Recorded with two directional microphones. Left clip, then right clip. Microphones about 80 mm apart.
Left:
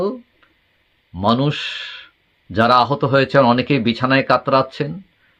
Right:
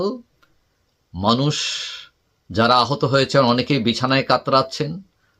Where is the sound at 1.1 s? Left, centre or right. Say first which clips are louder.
Left 2 dB; right.